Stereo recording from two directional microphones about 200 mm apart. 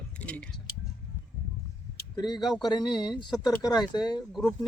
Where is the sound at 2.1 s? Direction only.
20° left (ahead or behind).